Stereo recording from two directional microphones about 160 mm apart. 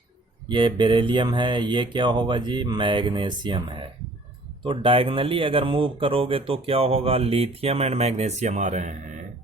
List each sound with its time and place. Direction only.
0.4 s speech: 30° right (ahead or behind); by 9.2 s 50° right (ahead or behind)